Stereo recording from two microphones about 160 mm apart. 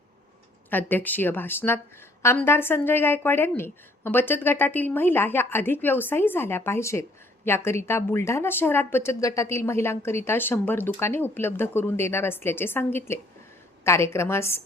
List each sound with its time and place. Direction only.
0.7 s a woman's voice: 10° left (ahead or behind)